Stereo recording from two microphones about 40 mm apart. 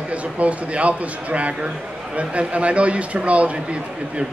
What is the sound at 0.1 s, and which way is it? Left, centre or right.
A man's voice, right.